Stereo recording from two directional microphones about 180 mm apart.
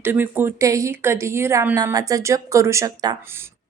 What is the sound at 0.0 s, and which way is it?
A woman's voice, 10° right (ahead or behind).